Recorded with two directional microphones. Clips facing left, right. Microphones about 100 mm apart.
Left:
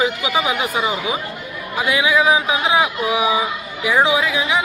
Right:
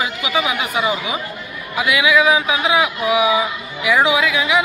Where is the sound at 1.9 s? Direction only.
30° left (ahead or behind).